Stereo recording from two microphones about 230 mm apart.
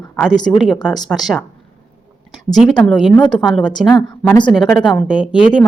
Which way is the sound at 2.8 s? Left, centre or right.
Centre.